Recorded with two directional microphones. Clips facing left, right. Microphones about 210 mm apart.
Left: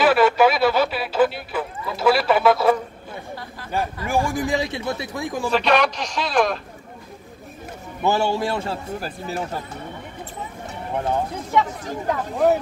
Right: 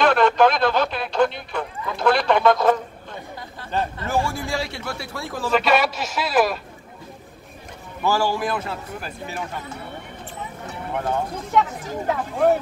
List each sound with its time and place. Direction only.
0.0 s a sound: 5° left (ahead or behind)
3.7 s a man's voice: 10° left (ahead or behind)
5.5 s a man's voice: 5° right (ahead or behind)
8.0 s a man's voice: 20° left (ahead or behind)
10.9 s speech: 25° left (ahead or behind)